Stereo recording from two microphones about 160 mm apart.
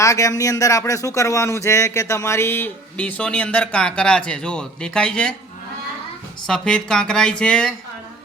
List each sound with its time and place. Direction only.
0.0 s speech: 20° left (ahead or behind)
6.5 s speech: 5° left (ahead or behind)